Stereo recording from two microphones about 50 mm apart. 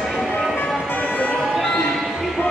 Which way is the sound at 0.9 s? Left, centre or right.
Left.